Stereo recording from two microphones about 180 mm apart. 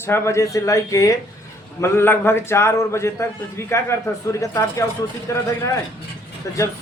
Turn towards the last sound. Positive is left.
turn(degrees=15)  # may be behind; listen again after turning